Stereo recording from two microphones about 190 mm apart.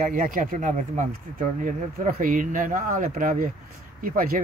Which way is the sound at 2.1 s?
45° right (ahead or behind).